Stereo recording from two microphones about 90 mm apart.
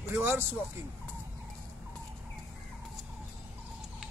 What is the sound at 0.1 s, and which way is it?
Speech, 25° right (ahead or behind).